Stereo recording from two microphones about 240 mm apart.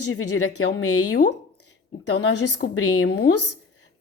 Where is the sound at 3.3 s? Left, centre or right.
Left.